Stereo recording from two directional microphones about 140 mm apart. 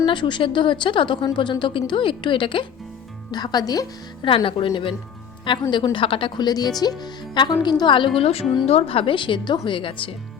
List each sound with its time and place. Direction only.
0.0 s a woman's voice: 35° left (ahead or behind)
4.3 s speech: 40° left (ahead or behind)